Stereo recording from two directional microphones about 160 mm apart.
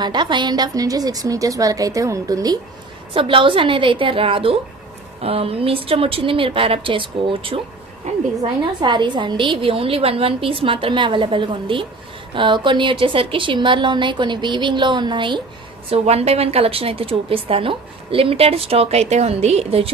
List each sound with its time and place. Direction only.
0.0 s a woman's voice: 30° right (ahead or behind)
8.8 s a woman's voice: 30° right (ahead or behind)